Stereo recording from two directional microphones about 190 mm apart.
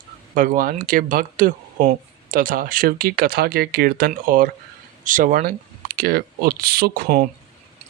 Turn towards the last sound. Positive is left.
turn(degrees=-50)  # may be behind; listen again after turning